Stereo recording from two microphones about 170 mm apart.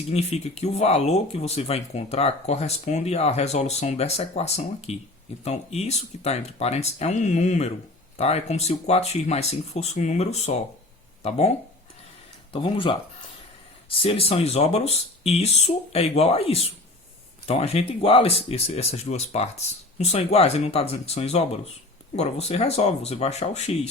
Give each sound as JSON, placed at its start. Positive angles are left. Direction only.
{"t": 0.1, "sound": "speech", "side_deg": 40}
{"t": 12.5, "sound": "speech", "side_deg": 30}